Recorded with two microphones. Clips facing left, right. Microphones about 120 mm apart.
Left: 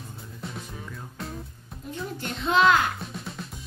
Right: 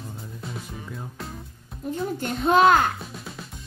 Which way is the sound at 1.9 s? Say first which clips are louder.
Right 5 dB; 45° right (ahead or behind).